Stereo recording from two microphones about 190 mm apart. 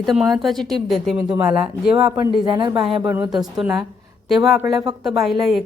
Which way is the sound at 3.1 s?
10° right (ahead or behind).